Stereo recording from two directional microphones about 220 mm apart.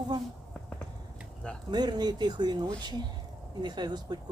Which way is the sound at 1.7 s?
20° right (ahead or behind).